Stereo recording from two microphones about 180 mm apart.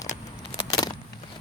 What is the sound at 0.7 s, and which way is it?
Vehicle, 20° left (ahead or behind).